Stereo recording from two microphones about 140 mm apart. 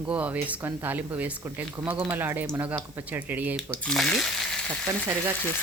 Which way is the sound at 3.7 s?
5° left (ahead or behind).